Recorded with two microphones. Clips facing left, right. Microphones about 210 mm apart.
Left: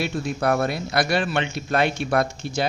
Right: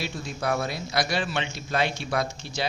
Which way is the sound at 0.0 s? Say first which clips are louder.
Left 7 dB; 55° left (ahead or behind).